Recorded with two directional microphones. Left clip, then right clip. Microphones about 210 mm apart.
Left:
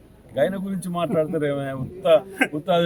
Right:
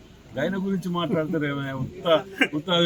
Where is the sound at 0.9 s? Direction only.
20° left (ahead or behind).